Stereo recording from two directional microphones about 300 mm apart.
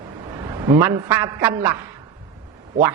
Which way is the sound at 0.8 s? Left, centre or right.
Centre.